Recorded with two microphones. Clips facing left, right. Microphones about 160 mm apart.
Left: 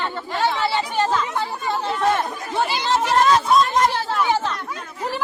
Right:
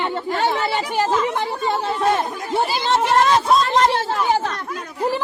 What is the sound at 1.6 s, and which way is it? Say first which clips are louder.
Chatter: right 1 dB; 20° right (ahead or behind).